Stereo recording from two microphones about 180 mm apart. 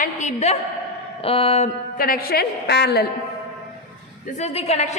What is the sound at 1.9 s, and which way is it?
A woman's voice, 55° left (ahead or behind).